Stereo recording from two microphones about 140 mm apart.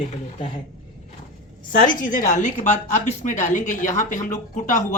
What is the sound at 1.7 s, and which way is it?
A woman's voice, 75° left (ahead or behind).